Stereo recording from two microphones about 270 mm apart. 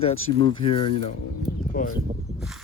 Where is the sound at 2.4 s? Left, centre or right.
Centre.